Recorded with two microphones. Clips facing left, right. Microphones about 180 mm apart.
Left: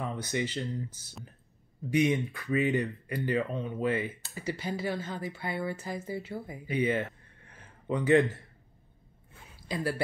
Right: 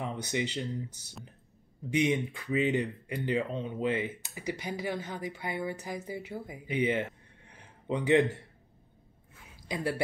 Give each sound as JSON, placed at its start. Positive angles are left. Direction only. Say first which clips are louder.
{"t": 0.0, "sound": "speech", "louder": "even", "side_deg": -15}
{"t": 9.7, "sound": "speech", "louder": "left 1 dB", "side_deg": -20}